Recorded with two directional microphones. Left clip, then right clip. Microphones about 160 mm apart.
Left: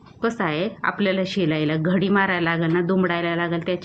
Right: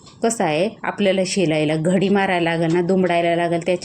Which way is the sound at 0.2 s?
15° right (ahead or behind).